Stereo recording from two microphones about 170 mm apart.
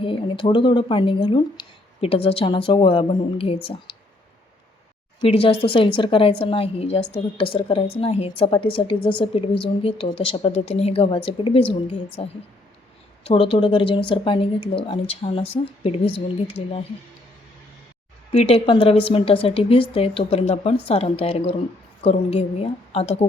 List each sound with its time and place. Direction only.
0.0 s a woman's voice: 30° left (ahead or behind)
5.3 s a woman's voice: 35° left (ahead or behind)
18.3 s a woman's voice: 35° left (ahead or behind)